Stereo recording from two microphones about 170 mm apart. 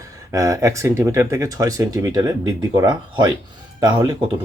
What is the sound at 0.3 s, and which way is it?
Speech, 20° right (ahead or behind).